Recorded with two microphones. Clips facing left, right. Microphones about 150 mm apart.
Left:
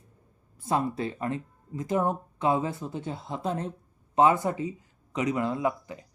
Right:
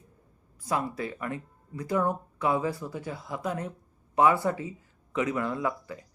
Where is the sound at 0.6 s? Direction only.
25° left (ahead or behind).